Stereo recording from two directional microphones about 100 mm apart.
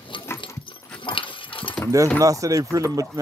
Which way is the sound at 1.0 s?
55° left (ahead or behind).